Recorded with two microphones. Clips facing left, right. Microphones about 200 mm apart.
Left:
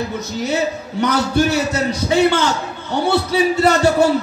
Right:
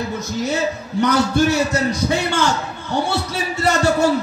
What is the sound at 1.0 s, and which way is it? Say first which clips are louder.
A man's voice: even; 60° left (ahead or behind).